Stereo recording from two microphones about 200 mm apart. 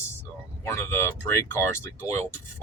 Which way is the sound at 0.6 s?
10° left (ahead or behind).